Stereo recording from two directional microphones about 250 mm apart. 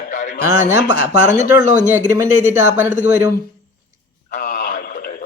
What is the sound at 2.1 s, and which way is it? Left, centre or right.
Speech, centre.